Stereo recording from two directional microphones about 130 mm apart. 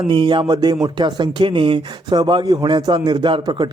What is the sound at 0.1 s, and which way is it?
Speech, 35° right (ahead or behind).